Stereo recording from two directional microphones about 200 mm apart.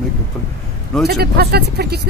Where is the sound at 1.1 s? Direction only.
50° right (ahead or behind).